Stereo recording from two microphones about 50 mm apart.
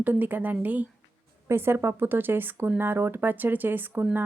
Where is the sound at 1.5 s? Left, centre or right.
Right.